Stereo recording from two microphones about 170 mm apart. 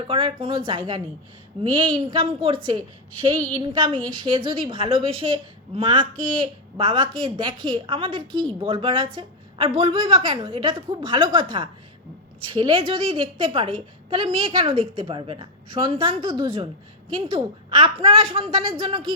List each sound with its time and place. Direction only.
0.1 s a woman's voice: 30° right (ahead or behind)
3.6 s a woman's voice: 30° right (ahead or behind)